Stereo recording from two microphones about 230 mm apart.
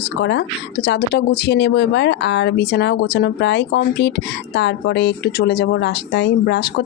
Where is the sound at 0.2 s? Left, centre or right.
Left.